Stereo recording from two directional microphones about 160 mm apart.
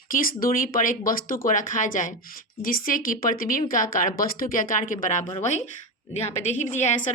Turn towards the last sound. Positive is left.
turn(degrees=50)  # may be behind; listen again after turning